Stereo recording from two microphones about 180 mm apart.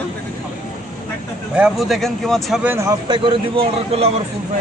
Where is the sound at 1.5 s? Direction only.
5° right (ahead or behind).